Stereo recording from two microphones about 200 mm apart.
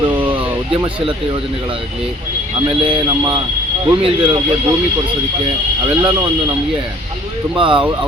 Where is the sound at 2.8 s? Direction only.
25° right (ahead or behind).